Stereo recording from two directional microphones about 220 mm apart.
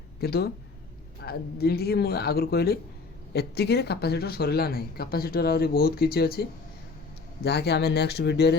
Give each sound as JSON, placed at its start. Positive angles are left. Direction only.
{"t": 0.2, "sound": "speech", "side_deg": 45}
{"t": 7.4, "sound": "speech", "side_deg": 50}